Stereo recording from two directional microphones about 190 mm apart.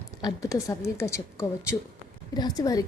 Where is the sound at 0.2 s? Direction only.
20° left (ahead or behind).